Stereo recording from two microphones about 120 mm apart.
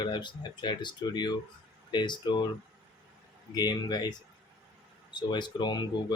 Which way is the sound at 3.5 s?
35° left (ahead or behind).